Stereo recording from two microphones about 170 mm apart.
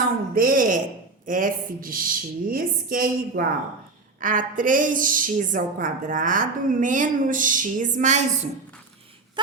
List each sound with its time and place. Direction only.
0.3 s a woman's voice: 55° right (ahead or behind)